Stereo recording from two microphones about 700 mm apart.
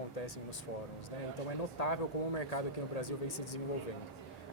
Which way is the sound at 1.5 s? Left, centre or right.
Left.